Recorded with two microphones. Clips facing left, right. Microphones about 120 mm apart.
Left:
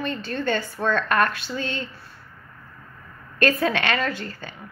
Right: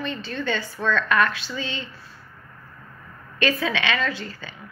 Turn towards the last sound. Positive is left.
turn(degrees=50)  # may be behind; listen again after turning